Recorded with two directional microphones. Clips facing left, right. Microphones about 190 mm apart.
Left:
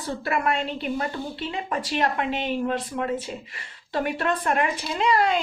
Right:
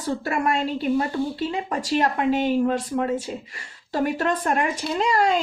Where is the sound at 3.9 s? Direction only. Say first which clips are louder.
Right 2 dB; 40° right (ahead or behind).